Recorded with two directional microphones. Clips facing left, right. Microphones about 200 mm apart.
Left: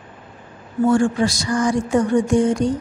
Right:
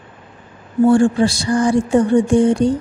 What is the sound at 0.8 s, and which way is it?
Speech, 30° right (ahead or behind).